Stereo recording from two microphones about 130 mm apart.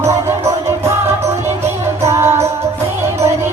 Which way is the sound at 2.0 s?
20° right (ahead or behind).